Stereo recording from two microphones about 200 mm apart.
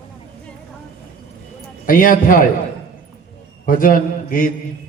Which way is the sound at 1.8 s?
45° left (ahead or behind).